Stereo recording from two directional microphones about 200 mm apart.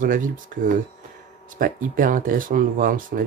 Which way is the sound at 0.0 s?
45° right (ahead or behind).